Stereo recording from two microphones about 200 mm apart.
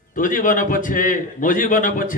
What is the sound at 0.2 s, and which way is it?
A man's voice, 40° left (ahead or behind).